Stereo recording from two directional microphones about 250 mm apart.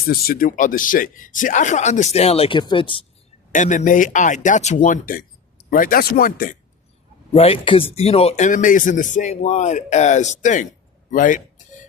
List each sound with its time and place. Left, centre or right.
0.1 s speech: left
3.5 s speech: left
7.3 s speech: left
11.1 s a sound: left